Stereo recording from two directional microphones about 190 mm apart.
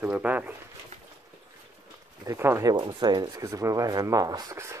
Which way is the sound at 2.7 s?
20° right (ahead or behind).